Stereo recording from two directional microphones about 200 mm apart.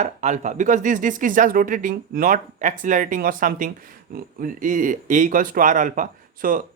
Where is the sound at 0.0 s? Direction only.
35° right (ahead or behind).